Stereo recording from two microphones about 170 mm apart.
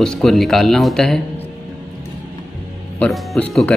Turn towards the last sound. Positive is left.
turn(degrees=5)  # may be behind; listen again after turning